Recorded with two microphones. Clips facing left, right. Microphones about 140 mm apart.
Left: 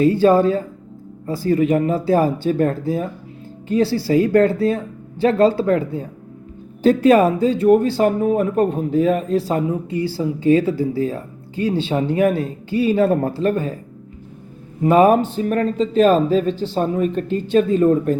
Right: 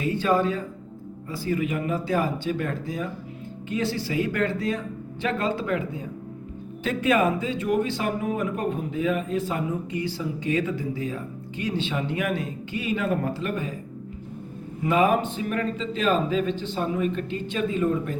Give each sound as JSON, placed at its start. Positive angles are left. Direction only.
{"t": 0.0, "sound": "speech", "side_deg": 35}
{"t": 14.8, "sound": "speech", "side_deg": 40}